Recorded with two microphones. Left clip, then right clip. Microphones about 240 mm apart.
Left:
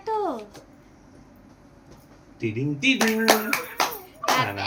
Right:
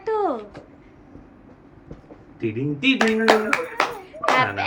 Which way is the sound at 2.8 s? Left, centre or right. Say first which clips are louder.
Right 2 dB; centre.